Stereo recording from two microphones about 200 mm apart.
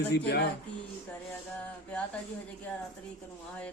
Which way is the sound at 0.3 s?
55° left (ahead or behind).